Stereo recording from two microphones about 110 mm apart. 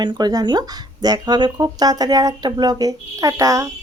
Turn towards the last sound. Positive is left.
turn(degrees=-30)  # may be behind; listen again after turning